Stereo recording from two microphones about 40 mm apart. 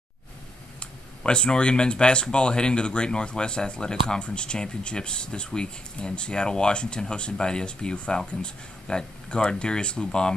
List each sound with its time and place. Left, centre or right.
0.7 s speech: left